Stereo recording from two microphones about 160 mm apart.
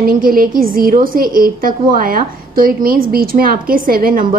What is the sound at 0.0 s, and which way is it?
A woman's voice, 65° right (ahead or behind).